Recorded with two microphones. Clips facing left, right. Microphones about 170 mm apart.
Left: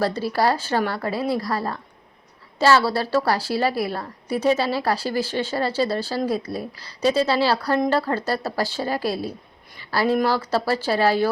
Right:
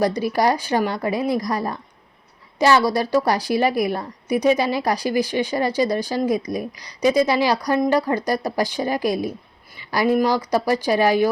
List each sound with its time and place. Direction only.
0.0 s a woman's voice: 15° right (ahead or behind)